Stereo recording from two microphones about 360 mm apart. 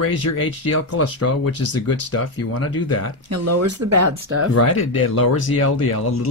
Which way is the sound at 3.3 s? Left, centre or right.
Right.